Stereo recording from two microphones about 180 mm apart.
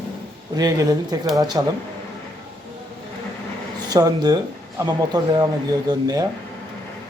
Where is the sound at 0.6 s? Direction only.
20° right (ahead or behind).